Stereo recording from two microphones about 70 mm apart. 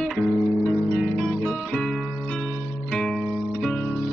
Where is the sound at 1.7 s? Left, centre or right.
Centre.